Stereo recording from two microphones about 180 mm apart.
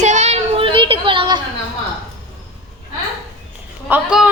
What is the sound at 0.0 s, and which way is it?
Child singing, 40° right (ahead or behind).